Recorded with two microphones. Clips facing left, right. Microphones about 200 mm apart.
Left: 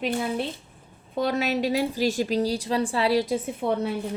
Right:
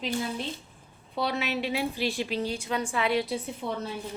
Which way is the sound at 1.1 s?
45° left (ahead or behind).